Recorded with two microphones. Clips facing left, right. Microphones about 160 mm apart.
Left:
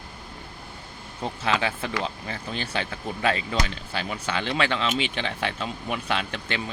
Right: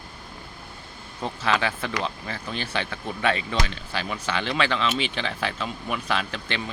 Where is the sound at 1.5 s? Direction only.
30° left (ahead or behind).